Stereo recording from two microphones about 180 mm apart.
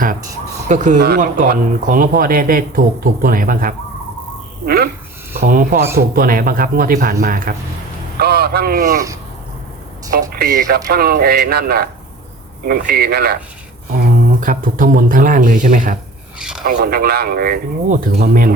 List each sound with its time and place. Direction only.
0.7 s speech: 45° right (ahead or behind)
10.1 s speech: 50° right (ahead or behind)
14.4 s speech: 50° right (ahead or behind)
16.4 s a sound: 5° right (ahead or behind)
16.6 s speech: 60° right (ahead or behind)